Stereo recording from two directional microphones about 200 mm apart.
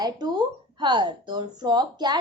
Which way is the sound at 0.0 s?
20° right (ahead or behind).